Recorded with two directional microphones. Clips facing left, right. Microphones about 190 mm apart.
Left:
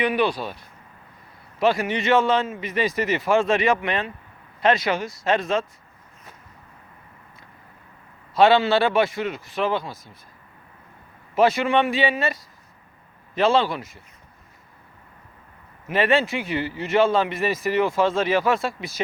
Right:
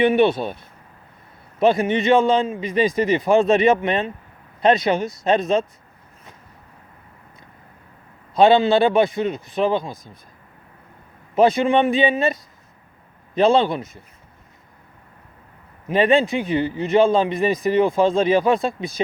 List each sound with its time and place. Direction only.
0.0 s a man's voice: 25° right (ahead or behind)
1.5 s a man's voice: 20° right (ahead or behind)
8.4 s a man's voice: 20° right (ahead or behind)
11.3 s a man's voice: 20° right (ahead or behind)
15.9 s a man's voice: 15° right (ahead or behind)